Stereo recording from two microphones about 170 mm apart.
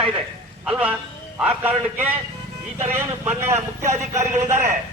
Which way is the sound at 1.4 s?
10° right (ahead or behind).